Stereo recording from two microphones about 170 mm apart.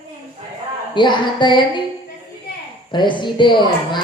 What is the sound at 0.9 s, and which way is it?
Speech, 25° left (ahead or behind).